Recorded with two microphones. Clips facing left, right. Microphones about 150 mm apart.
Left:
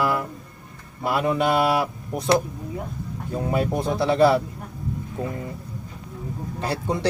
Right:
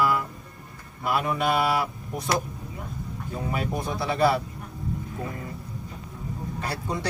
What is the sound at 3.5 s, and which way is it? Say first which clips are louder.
Speech: left 6 dB; 25° left (ahead or behind).